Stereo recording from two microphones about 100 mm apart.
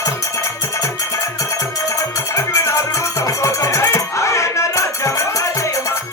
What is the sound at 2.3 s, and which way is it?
Music, 30° left (ahead or behind).